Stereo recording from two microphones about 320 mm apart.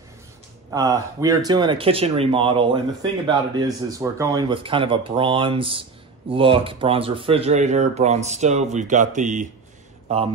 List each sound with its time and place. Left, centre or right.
0.7 s speech: centre